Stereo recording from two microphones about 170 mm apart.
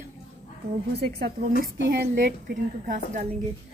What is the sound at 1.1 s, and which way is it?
A woman's voice, 65° right (ahead or behind).